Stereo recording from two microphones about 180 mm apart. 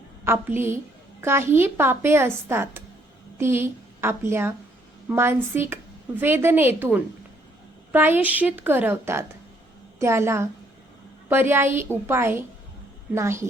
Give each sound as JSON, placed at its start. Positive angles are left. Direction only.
{"t": 0.3, "sound": "a woman's voice", "side_deg": -15}